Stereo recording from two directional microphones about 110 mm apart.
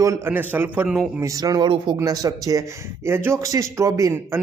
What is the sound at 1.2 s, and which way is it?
Speech, 35° right (ahead or behind).